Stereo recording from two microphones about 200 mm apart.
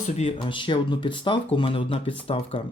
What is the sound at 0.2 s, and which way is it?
Speech, 30° left (ahead or behind).